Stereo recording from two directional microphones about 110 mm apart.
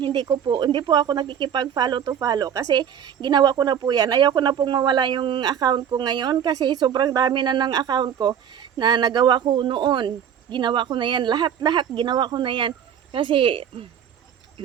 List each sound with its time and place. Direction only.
0.0 s a woman's voice: 40° right (ahead or behind)